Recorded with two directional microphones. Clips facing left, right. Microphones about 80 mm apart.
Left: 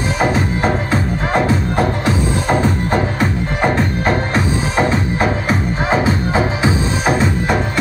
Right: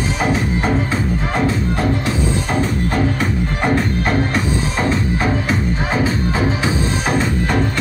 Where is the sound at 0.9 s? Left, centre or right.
Left.